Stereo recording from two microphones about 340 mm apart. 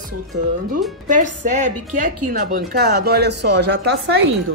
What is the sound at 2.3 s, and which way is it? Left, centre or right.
Speech, right.